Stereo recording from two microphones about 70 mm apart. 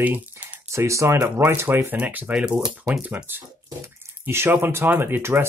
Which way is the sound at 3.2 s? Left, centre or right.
Right.